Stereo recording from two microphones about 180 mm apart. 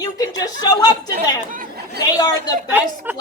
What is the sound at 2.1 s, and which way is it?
Speech, 20° left (ahead or behind).